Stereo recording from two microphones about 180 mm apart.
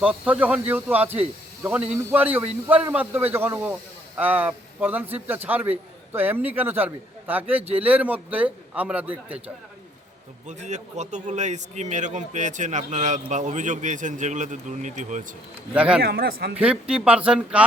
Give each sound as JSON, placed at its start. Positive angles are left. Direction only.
{"t": 0.0, "sound": "speech", "side_deg": -10}
{"t": 10.4, "sound": "a man's voice", "side_deg": -40}
{"t": 15.7, "sound": "speech", "side_deg": -5}
{"t": 16.0, "sound": "a man's voice", "side_deg": -60}
{"t": 16.6, "sound": "speech", "side_deg": -5}